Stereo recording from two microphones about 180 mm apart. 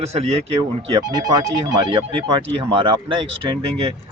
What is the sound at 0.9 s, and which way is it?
Speech, 20° right (ahead or behind).